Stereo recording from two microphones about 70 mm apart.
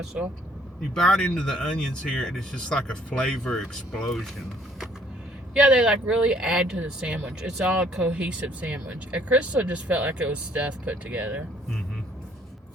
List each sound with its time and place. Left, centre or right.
0.9 s speech: centre
5.5 s speech: centre